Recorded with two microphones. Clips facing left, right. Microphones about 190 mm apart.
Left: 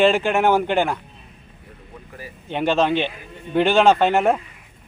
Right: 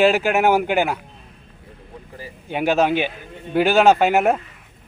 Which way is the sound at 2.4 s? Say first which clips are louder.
Right 1 dB; 10° right (ahead or behind).